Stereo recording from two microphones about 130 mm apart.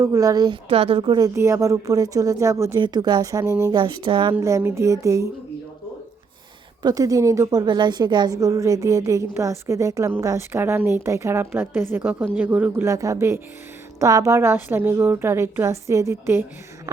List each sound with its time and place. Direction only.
0.0 s speech: 25° right (ahead or behind)
1.4 s a woman's voice: 25° right (ahead or behind)
2.8 s speech: 35° right (ahead or behind)
3.8 s speech: 35° right (ahead or behind)
4.4 s a woman's voice: 25° right (ahead or behind)
6.8 s a woman's voice: 25° right (ahead or behind); by 12.7 s 10° right (ahead or behind)
12.7 s a woman's voice: 20° right (ahead or behind)